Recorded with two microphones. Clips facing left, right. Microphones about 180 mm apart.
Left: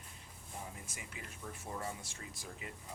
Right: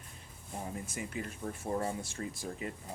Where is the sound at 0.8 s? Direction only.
50° right (ahead or behind).